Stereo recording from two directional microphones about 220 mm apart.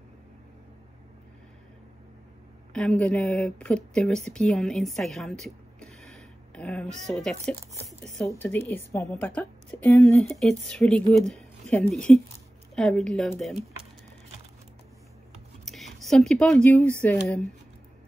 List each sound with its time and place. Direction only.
2.7 s a woman's voice: 5° left (ahead or behind)
15.6 s speech: centre (ahead or behind)